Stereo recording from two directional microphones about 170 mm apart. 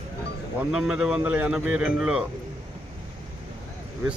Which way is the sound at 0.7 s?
5° right (ahead or behind).